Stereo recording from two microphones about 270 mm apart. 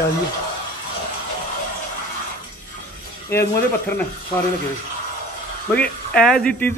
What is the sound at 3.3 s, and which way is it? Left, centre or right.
Speech, centre.